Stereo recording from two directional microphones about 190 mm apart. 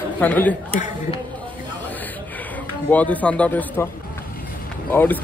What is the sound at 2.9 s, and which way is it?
Speech, 10° left (ahead or behind).